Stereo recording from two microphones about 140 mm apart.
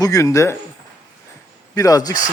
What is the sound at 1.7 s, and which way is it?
Speech, 25° left (ahead or behind).